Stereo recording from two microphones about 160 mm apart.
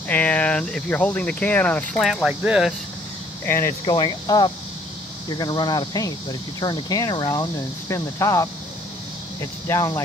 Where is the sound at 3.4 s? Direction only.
15° left (ahead or behind).